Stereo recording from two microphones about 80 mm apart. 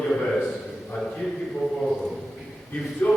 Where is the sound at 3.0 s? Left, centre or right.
Centre.